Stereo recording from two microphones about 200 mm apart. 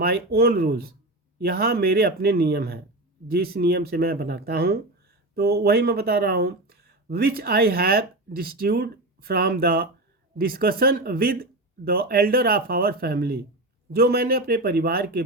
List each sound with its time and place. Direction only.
0.0 s speech: 50° right (ahead or behind)